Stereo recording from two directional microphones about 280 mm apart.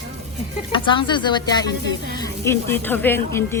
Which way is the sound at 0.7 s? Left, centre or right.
Centre.